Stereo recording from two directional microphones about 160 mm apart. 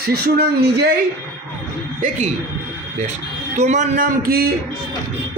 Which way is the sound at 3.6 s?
50° right (ahead or behind).